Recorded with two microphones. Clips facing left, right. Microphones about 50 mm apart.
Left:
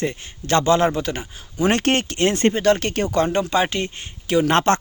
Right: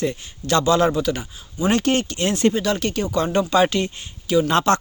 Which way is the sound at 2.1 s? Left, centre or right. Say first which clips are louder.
Left 1 dB; left.